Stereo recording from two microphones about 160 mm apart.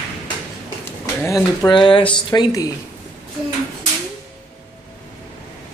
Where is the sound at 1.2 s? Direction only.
20° left (ahead or behind).